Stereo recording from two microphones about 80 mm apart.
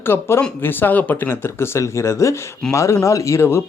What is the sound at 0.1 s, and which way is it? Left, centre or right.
Speech, left.